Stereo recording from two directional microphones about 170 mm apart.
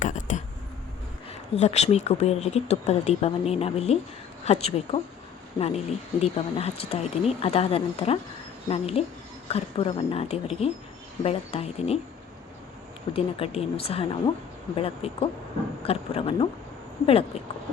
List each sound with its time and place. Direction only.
0.0 s a sound: 45° left (ahead or behind)
1.3 s speech: 40° left (ahead or behind)
13.1 s speech: 35° left (ahead or behind)